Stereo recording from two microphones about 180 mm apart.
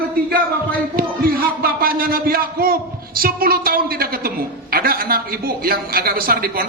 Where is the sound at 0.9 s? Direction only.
55° right (ahead or behind).